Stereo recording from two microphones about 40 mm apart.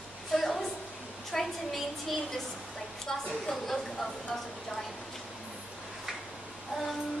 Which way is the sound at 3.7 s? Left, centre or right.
Centre.